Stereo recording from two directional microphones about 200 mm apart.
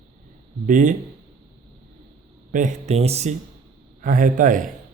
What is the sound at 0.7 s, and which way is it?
Speech, 40° right (ahead or behind).